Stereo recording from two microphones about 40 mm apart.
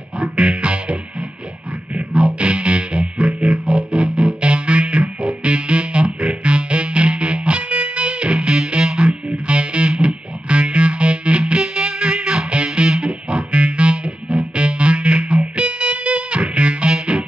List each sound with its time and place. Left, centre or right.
0.2 s music: right
2.0 s music: right